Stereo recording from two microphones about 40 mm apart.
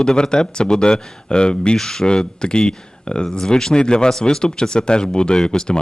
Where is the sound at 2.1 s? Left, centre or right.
Left.